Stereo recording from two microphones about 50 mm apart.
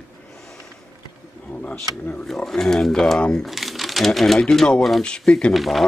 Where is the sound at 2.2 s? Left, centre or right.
Centre.